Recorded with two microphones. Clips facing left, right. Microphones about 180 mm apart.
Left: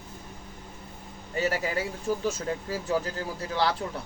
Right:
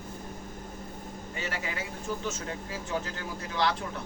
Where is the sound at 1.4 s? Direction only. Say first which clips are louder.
Left 9 dB; 40° left (ahead or behind).